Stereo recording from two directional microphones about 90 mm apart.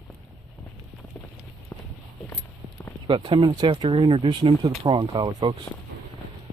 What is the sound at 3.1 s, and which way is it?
Speech, 70° right (ahead or behind).